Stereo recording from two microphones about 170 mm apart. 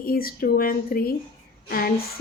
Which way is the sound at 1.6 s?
60° left (ahead or behind).